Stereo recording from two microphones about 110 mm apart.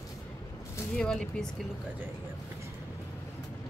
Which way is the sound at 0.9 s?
5° left (ahead or behind).